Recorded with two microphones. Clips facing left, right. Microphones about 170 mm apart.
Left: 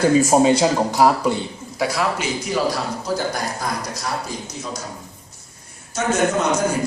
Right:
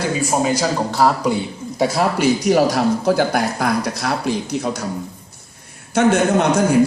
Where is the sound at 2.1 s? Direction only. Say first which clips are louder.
Right 8 dB; 65° right (ahead or behind).